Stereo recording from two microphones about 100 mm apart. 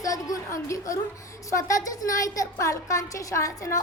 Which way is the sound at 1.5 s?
30° left (ahead or behind).